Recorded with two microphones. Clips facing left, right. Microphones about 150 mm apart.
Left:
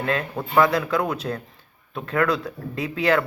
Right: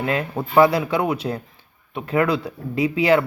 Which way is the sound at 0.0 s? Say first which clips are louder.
Right 2 dB; 20° right (ahead or behind).